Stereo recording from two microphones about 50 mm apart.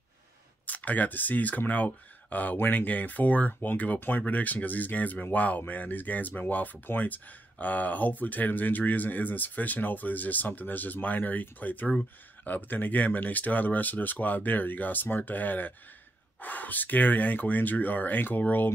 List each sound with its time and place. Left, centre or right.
0.7 s speech: left